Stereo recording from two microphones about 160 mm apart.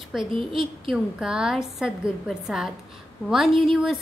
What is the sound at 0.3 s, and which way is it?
Speech, 35° right (ahead or behind).